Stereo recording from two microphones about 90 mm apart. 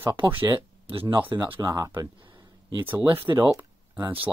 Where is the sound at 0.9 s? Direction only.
90° right.